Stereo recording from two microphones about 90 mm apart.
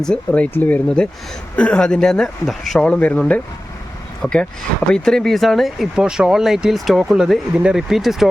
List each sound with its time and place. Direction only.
0.0 s speech: 10° left (ahead or behind)
2.8 s speech: 15° left (ahead or behind); by 8.3 s centre (ahead or behind)